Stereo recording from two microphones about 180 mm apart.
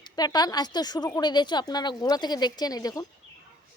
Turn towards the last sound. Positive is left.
turn(degrees=20)  # may be behind; listen again after turning